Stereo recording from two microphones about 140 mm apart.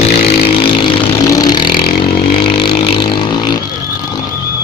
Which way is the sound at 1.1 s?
25° left (ahead or behind).